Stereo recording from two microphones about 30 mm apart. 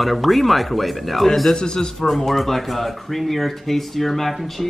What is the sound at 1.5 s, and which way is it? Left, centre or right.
Speech, left.